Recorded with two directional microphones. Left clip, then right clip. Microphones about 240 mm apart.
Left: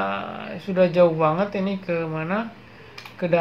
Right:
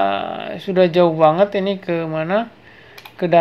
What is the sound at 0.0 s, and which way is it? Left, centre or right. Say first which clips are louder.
Speech: right 8 dB; right.